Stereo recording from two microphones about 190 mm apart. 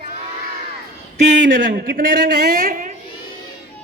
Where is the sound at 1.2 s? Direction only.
40° right (ahead or behind).